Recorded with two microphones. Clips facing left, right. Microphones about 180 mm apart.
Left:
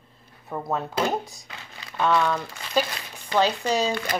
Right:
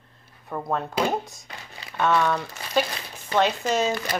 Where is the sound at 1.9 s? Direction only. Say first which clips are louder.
Even; 5° right (ahead or behind).